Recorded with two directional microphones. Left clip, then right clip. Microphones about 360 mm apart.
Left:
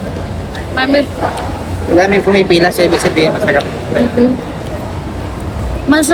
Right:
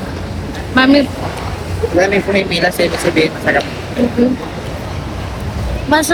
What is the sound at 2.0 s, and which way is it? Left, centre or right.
Speech, centre.